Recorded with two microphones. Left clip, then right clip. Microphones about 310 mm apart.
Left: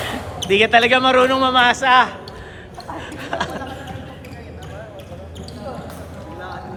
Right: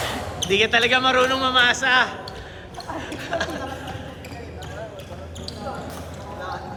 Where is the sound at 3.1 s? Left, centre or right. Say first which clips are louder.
Left 2 dB; left.